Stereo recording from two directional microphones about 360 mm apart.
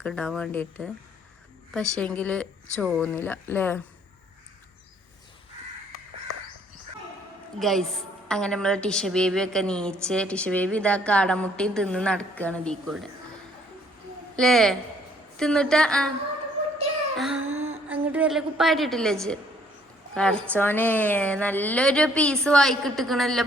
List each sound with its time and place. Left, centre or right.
0.0 s a woman's voice: centre
1.7 s a woman's voice: centre
7.6 s a woman's voice: centre
14.3 s a woman's voice: centre
17.2 s a sound: centre
17.4 s a sound: right
17.8 s a woman's voice: centre